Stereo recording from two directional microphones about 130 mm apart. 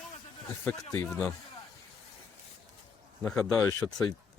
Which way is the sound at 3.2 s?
5° left (ahead or behind).